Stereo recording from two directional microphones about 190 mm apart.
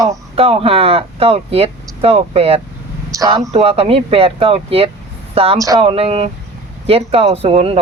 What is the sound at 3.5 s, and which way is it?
Speech, 30° right (ahead or behind).